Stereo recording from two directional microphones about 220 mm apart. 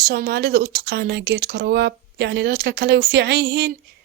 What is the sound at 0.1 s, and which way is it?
Speech, 45° right (ahead or behind).